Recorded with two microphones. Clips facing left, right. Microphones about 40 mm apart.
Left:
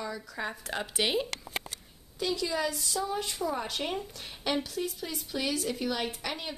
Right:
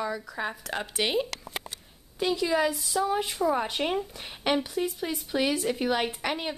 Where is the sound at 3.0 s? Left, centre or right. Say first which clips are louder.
Right 7 dB; right.